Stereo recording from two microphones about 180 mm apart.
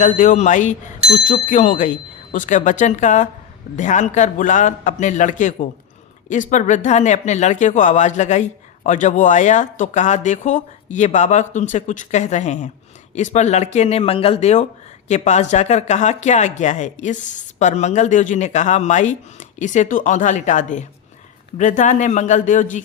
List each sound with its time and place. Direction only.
0.0 s speech: 45° left (ahead or behind)